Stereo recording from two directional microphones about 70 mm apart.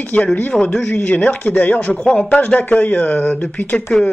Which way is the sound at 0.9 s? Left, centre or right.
Centre.